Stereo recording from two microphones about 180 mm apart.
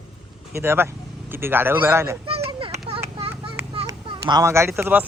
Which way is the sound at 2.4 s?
30° right (ahead or behind).